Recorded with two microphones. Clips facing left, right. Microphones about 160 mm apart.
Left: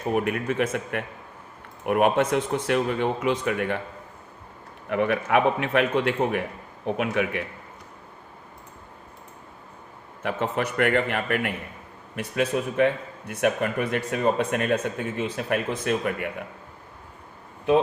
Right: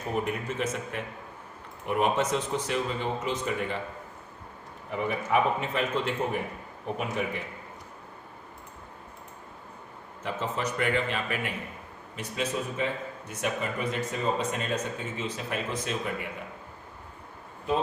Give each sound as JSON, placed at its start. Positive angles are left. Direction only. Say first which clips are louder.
{"t": 0.1, "sound": "speech", "louder": "left 6 dB", "side_deg": 65}
{"t": 4.9, "sound": "a man's voice", "louder": "left 5 dB", "side_deg": 70}
{"t": 10.2, "sound": "speech", "louder": "left 5 dB", "side_deg": 60}